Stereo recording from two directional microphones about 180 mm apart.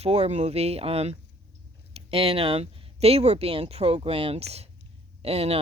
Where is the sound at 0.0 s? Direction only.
35° right (ahead or behind).